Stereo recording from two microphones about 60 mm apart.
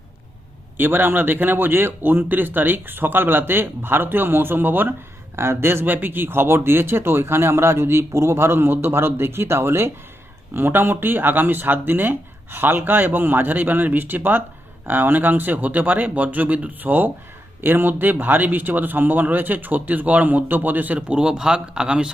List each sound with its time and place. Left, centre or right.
0.8 s speech: right; by 22.1 s centre